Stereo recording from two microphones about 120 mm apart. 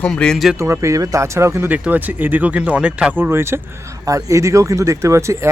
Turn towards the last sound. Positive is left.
turn(degrees=-25)  # may be behind; listen again after turning